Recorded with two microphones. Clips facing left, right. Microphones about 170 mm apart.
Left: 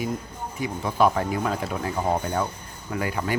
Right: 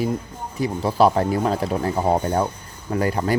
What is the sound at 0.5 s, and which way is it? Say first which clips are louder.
Speech: right 5 dB; 35° right (ahead or behind).